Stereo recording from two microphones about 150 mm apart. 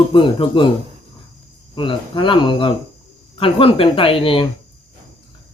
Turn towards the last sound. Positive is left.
turn(degrees=35)  # may be behind; listen again after turning